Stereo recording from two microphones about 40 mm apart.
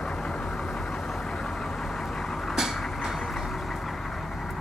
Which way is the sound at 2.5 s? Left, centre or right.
Centre.